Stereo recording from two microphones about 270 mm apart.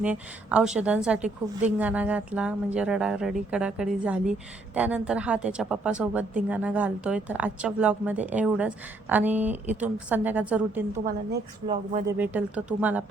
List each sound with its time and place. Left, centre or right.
0.0 s speech: centre
11.7 s speech: right
12.0 s speech: centre